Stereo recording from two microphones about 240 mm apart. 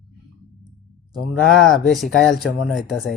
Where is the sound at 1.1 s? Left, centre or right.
Centre.